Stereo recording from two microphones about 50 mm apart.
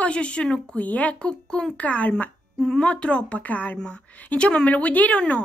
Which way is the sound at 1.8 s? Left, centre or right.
Left.